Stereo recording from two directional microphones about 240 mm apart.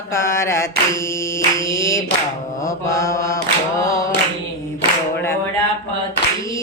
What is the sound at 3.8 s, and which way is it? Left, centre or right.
A capella, centre.